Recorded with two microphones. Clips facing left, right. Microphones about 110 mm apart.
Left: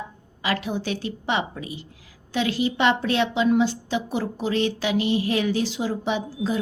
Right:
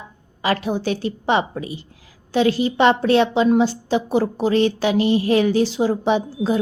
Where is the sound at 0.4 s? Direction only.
40° right (ahead or behind).